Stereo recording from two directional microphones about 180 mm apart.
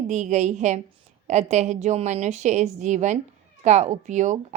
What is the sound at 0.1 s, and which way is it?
A woman's voice, 40° right (ahead or behind).